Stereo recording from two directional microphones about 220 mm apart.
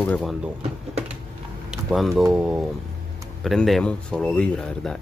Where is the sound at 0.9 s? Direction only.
25° right (ahead or behind).